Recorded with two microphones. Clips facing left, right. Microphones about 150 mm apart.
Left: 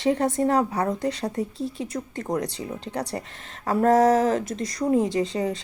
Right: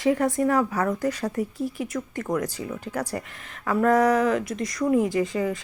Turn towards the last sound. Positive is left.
turn(degrees=30)  # may be behind; listen again after turning